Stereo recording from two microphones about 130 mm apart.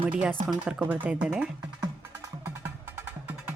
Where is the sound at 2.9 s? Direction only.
15° right (ahead or behind).